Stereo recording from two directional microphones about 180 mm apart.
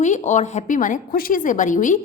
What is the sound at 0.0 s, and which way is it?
A woman's voice, 40° left (ahead or behind).